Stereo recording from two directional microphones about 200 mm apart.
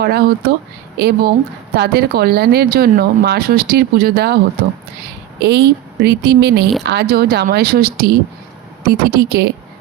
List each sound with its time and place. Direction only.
0.0 s speech: 50° right (ahead or behind)
5.4 s speech: 55° right (ahead or behind)